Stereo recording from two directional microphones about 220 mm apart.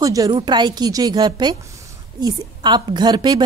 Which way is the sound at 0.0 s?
15° right (ahead or behind).